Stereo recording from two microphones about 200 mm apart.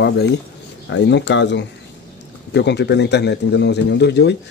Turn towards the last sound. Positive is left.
turn(degrees=55)  # may be behind; listen again after turning